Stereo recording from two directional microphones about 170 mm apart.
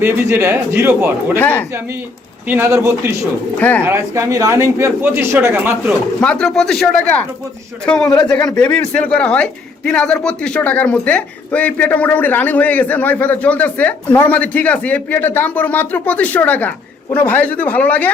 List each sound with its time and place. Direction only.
0.0 s speech: 15° right (ahead or behind)
1.4 s speech: 10° left (ahead or behind)
2.5 s speech: 15° right (ahead or behind)
3.6 s speech: 10° left (ahead or behind)
3.8 s speech: 15° right (ahead or behind)
6.1 s speech: 5° left (ahead or behind)